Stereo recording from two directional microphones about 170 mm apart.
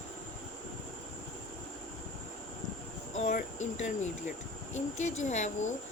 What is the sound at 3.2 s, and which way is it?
Speech, 45° left (ahead or behind).